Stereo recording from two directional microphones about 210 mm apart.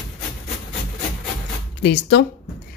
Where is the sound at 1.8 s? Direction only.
55° left (ahead or behind).